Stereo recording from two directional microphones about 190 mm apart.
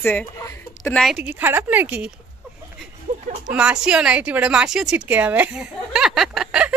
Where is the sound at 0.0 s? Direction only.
10° left (ahead or behind).